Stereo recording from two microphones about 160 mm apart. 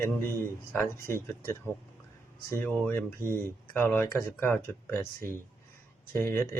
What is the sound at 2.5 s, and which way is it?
Speech, 10° left (ahead or behind).